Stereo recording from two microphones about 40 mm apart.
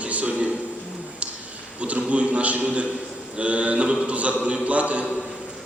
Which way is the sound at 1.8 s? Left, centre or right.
Right.